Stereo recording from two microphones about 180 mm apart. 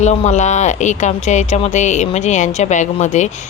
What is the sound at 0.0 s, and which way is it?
Speech, 40° left (ahead or behind).